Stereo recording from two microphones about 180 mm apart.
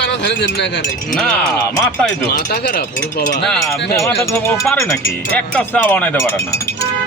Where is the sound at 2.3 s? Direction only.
60° left (ahead or behind).